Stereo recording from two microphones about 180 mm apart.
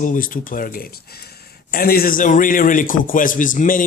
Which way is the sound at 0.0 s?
50° left (ahead or behind).